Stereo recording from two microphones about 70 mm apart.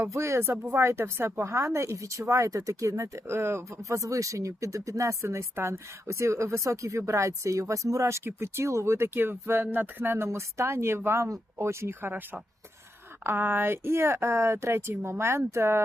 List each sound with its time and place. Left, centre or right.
0.1 s speech: right
10.2 s speech: right